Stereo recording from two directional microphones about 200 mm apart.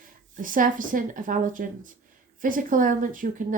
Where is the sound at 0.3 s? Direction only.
45° right (ahead or behind).